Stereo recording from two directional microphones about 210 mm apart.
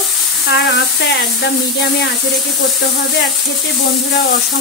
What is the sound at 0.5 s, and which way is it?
Speech, 55° left (ahead or behind).